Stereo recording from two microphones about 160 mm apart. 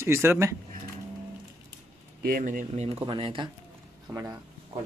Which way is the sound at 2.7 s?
40° right (ahead or behind).